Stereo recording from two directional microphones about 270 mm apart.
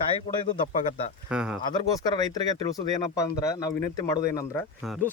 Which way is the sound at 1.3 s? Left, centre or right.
Centre.